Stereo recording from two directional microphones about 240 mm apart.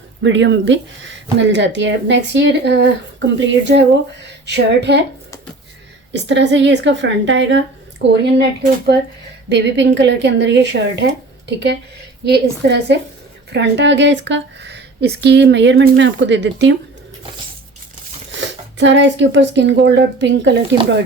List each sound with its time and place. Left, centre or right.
0.2 s speech: right
6.2 s speech: right
9.5 s speech: right
18.3 s speech: right